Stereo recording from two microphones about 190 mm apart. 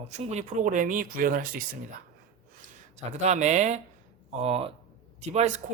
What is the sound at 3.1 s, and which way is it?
Speech, 35° right (ahead or behind).